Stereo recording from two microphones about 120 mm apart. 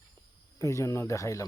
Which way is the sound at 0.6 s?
25° left (ahead or behind).